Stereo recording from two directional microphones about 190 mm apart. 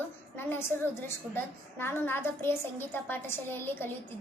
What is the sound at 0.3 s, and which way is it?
A child's voice, 10° left (ahead or behind).